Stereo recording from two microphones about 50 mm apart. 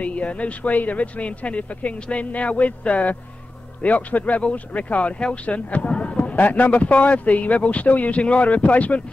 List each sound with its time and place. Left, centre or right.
0.0 s speech: left
6.3 s speech: left